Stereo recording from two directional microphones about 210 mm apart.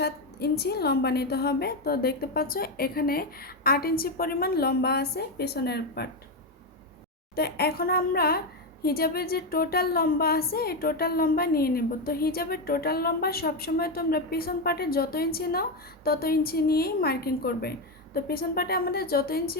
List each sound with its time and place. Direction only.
0.0 s speech: 50° left (ahead or behind)
7.3 s speech: 50° left (ahead or behind)